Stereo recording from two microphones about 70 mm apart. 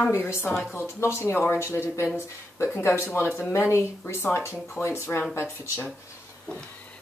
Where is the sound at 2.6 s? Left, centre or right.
Left.